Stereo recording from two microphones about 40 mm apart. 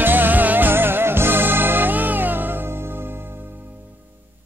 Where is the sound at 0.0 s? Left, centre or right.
Right.